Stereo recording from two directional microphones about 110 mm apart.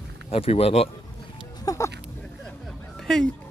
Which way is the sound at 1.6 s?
30° left (ahead or behind).